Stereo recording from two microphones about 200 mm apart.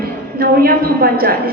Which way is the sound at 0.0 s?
50° right (ahead or behind).